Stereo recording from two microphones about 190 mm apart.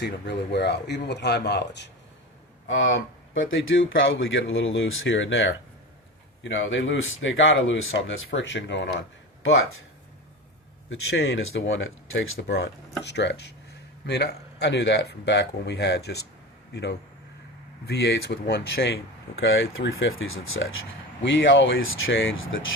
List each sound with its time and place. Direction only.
0.0 s speech: 65° left (ahead or behind)
2.6 s speech: 85° left
10.8 s speech: 90° left; by 16.2 s 60° left (ahead or behind)
17.8 s speech: 60° left (ahead or behind); by 22.6 s 90° left